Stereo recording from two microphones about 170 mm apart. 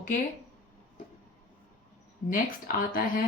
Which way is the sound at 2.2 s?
50° left (ahead or behind).